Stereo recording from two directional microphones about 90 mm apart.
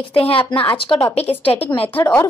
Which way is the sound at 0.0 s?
90° left.